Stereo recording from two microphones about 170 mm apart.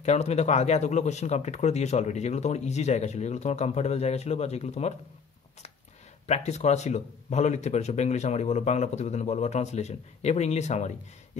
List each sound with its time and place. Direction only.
0.0 s speech: 40° left (ahead or behind)
6.2 s speech: 40° left (ahead or behind)